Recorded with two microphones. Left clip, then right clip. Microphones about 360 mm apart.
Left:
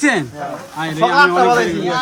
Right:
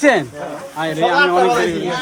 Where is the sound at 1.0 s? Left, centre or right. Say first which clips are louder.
Left 2 dB; left.